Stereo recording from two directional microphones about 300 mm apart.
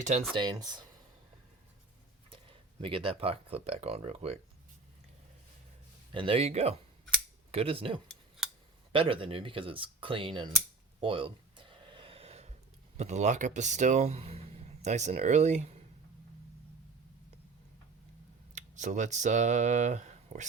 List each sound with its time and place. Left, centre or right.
0.0 s speech: right
2.3 s speech: centre
6.1 s speech: centre
11.0 s a sound: centre
13.0 s speech: right
18.5 s speech: right